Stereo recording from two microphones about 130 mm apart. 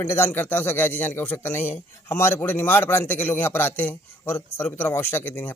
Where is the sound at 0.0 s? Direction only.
15° left (ahead or behind).